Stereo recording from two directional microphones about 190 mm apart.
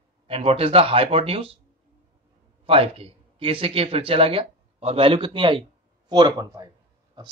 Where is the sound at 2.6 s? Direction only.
30° right (ahead or behind).